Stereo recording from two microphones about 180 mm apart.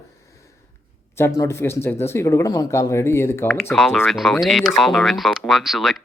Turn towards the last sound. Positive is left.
turn(degrees=0)  # may be behind; listen again after turning